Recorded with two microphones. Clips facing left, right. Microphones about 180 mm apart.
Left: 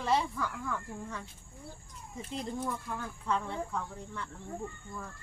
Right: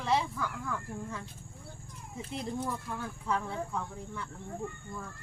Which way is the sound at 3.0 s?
10° right (ahead or behind).